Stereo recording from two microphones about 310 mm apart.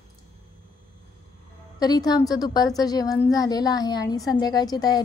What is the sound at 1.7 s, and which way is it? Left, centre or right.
A woman's voice, centre.